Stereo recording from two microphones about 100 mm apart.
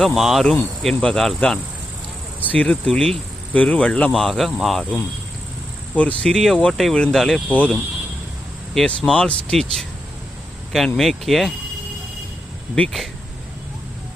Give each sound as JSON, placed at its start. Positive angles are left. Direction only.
{"t": 0.0, "sound": "speech", "side_deg": 0}
{"t": 5.9, "sound": "cricket", "side_deg": 15}
{"t": 6.2, "sound": "speech", "side_deg": 0}